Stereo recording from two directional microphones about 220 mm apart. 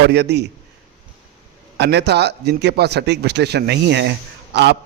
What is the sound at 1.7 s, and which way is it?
A man's voice, 50° right (ahead or behind).